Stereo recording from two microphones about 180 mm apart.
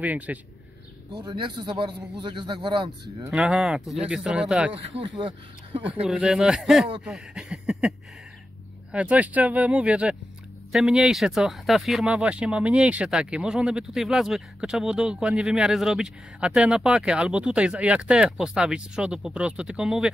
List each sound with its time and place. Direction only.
0.0 s speech: 10° right (ahead or behind)
1.1 s speech: 25° right (ahead or behind)
3.3 s speech: centre (ahead or behind)
4.7 s speech: 30° right (ahead or behind)
6.0 s speech: 5° right (ahead or behind)
7.1 s a sound: 5° right (ahead or behind)
8.9 s speech: 5° right (ahead or behind)